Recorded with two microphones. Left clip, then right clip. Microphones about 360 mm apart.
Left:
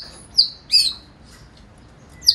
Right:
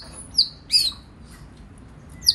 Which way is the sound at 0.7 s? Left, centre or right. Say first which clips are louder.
Left 3 dB; centre.